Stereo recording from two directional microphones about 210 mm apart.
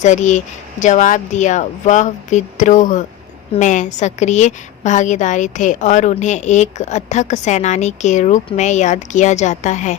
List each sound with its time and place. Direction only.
0.0 s a woman's voice: 35° left (ahead or behind)